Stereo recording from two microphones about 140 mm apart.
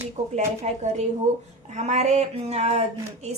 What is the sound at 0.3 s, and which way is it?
A woman's voice, 55° right (ahead or behind).